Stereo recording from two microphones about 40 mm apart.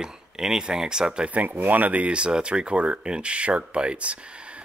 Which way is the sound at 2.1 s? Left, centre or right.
Right.